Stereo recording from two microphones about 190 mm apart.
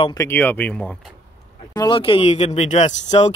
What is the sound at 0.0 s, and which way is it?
Speech, 15° left (ahead or behind).